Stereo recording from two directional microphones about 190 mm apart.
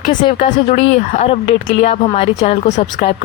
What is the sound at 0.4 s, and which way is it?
Speech, 40° left (ahead or behind).